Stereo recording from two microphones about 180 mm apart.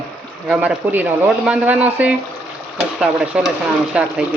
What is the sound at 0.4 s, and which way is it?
A man's voice, 5° right (ahead or behind).